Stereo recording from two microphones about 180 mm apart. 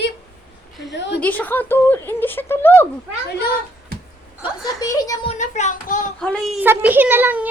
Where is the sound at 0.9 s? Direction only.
75° left (ahead or behind).